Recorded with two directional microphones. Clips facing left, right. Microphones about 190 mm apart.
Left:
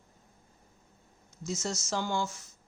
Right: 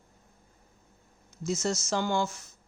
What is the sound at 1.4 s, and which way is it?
Speech, 65° right (ahead or behind).